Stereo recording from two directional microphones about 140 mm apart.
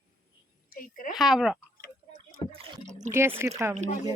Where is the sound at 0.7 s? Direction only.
80° left.